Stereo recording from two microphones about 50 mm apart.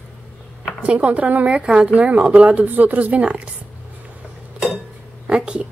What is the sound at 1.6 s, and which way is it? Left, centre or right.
Speech, centre.